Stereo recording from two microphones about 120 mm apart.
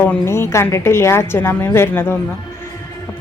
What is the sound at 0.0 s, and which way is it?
Speech, 20° left (ahead or behind).